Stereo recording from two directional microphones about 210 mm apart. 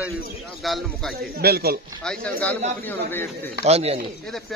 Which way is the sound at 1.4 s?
45° right (ahead or behind).